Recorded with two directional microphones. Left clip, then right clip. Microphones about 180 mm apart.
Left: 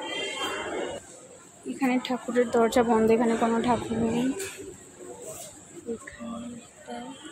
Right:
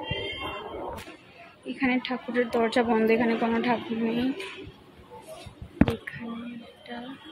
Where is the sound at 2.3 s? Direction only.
20° left (ahead or behind).